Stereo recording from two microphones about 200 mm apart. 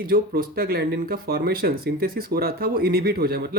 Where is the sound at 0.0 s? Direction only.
50° right (ahead or behind).